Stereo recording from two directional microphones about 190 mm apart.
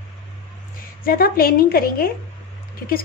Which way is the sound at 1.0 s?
50° left (ahead or behind).